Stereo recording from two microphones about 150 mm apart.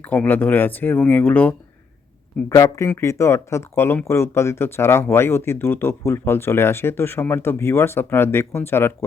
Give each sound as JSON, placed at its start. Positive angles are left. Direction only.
{"t": 0.0, "sound": "speech", "side_deg": 10}
{"t": 2.5, "sound": "speech", "side_deg": 20}